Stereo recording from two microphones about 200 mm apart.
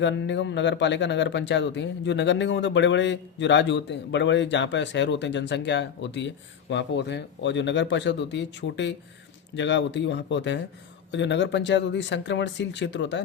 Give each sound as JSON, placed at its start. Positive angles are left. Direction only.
{"t": 0.0, "sound": "speech", "side_deg": 65}